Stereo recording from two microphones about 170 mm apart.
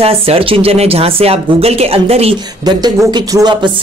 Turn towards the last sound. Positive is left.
turn(degrees=-25)  # may be behind; listen again after turning